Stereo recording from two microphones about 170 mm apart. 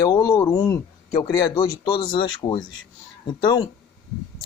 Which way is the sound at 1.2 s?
25° left (ahead or behind).